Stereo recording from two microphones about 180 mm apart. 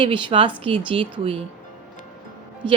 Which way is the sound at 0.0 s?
30° right (ahead or behind).